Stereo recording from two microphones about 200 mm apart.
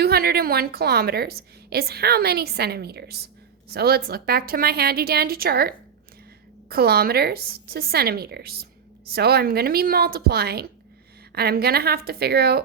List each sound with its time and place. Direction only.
0.0 s a woman's voice: 50° right (ahead or behind)